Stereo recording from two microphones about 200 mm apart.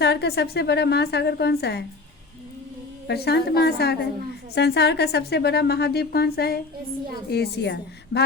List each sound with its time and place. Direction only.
0.0 s a woman's voice: 55° left (ahead or behind)
3.1 s a woman's voice: 55° left (ahead or behind)